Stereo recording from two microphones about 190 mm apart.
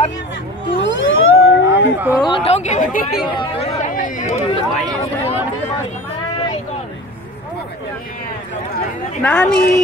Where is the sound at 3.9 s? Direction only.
45° left (ahead or behind).